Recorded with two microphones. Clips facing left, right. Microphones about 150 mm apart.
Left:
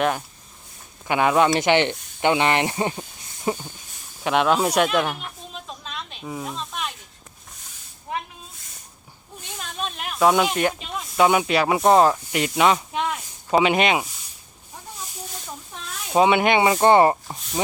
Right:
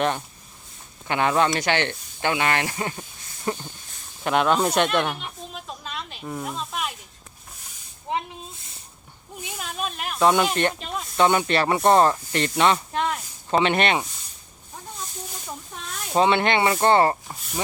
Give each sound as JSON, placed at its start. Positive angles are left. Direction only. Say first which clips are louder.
{"t": 1.0, "sound": "speech", "louder": "left 3 dB", "side_deg": 15}
{"t": 4.2, "sound": "speech", "louder": "left 1 dB", "side_deg": 0}
{"t": 5.8, "sound": "snake", "louder": "right 1 dB", "side_deg": 0}
{"t": 8.1, "sound": "snake", "louder": "right 2 dB", "side_deg": -25}
{"t": 9.4, "sound": "speech", "louder": "right 1 dB", "side_deg": -10}
{"t": 16.1, "sound": "speech", "louder": "left 2 dB", "side_deg": 10}